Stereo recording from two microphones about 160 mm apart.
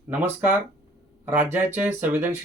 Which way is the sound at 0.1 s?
10° right (ahead or behind).